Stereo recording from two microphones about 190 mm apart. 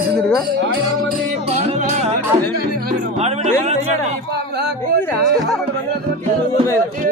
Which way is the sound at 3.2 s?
35° right (ahead or behind).